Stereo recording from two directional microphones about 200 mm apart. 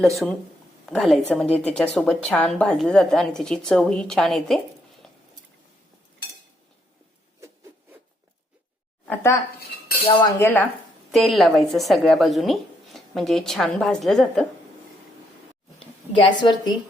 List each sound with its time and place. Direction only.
0.2 s speech: centre (ahead or behind)
9.0 s speech: 15° left (ahead or behind)
10.1 s cutlery: 10° left (ahead or behind)
11.1 s speech: centre (ahead or behind)
16.2 s a woman's voice: 20° left (ahead or behind)